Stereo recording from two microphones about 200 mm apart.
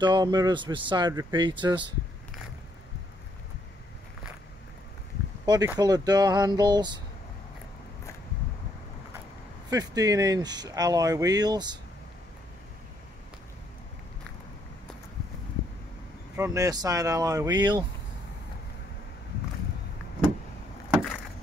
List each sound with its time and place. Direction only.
0.0 s speech: 20° right (ahead or behind)
5.4 s speech: 20° right (ahead or behind)
9.7 s speech: 20° right (ahead or behind)
16.3 s speech: 15° right (ahead or behind)
20.9 s a sound: centre (ahead or behind)